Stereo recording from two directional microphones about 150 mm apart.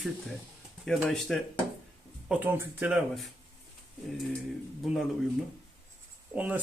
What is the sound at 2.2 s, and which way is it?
Speech, 10° right (ahead or behind).